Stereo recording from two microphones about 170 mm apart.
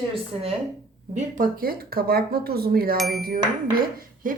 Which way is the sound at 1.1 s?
55° right (ahead or behind).